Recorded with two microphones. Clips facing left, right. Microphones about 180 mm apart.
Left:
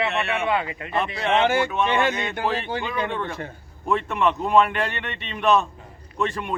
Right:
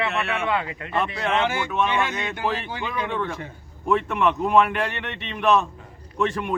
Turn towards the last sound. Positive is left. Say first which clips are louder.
# right 2 dB
turn(degrees=-5)  # may be behind; listen again after turning